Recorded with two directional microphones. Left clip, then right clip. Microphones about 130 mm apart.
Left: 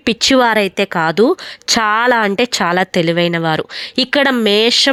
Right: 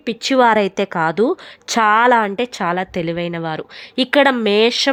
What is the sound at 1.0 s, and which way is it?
Speech, 10° left (ahead or behind).